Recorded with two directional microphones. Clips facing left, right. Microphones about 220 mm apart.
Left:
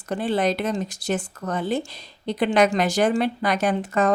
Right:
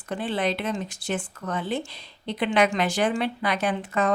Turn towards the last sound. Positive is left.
turn(degrees=40)  # may be behind; listen again after turning